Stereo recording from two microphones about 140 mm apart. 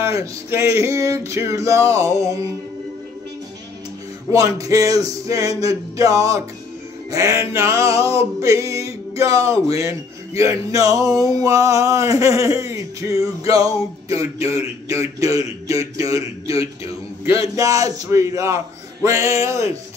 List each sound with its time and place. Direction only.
0.0 s speech: 20° right (ahead or behind)
4.3 s speech: 25° right (ahead or behind)